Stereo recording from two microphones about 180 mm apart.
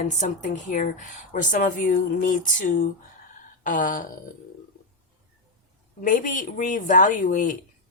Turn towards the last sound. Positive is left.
turn(degrees=45)  # may be behind; listen again after turning